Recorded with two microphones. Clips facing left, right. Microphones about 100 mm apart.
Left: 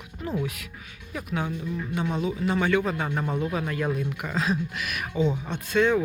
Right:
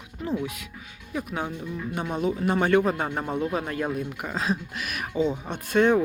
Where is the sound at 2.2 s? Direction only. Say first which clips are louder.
Right 4 dB; 45° right (ahead or behind).